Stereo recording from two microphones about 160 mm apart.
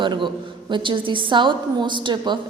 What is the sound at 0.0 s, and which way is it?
A woman's voice, 30° right (ahead or behind).